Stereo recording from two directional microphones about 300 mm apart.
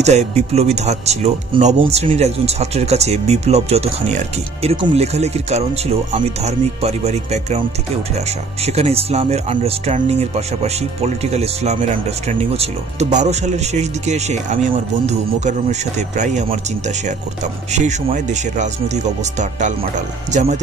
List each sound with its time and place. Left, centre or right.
0.0 s speech: right
8.6 s speech: right
17.7 s speech: right